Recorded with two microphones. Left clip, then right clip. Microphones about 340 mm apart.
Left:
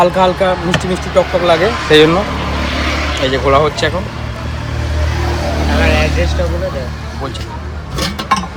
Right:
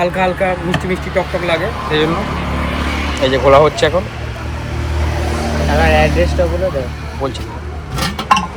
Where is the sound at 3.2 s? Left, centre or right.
Centre.